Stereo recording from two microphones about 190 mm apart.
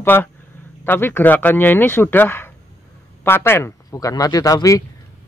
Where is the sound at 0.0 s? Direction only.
10° left (ahead or behind).